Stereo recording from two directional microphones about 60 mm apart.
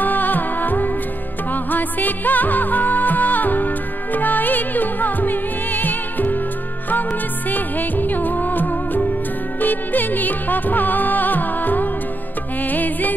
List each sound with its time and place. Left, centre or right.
0.0 s music: left